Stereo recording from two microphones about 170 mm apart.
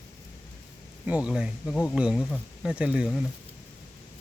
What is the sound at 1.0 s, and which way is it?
A woman's voice, 5° right (ahead or behind).